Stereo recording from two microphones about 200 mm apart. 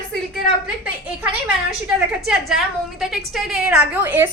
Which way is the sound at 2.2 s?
Centre (ahead or behind).